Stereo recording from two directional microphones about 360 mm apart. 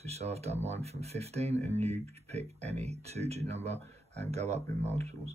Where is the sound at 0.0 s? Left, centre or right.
Centre.